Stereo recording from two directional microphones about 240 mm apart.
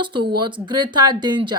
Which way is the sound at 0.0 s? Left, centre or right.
Centre.